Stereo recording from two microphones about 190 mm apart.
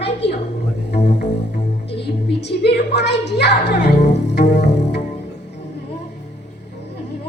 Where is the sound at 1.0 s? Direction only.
40° left (ahead or behind).